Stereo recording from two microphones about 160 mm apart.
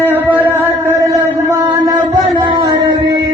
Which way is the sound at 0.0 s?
10° right (ahead or behind).